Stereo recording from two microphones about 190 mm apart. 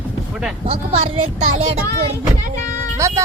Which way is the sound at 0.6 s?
30° right (ahead or behind).